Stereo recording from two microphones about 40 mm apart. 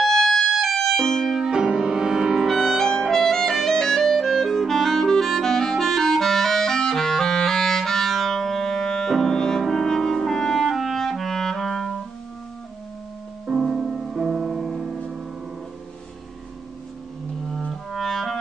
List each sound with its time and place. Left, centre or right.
0.0 s music: centre
1.4 s music: centre
2.4 s music: centre
9.6 s clarinet: centre
13.5 s music: centre
17.6 s clarinet: centre